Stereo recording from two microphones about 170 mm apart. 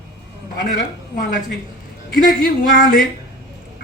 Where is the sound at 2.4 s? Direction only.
55° left (ahead or behind).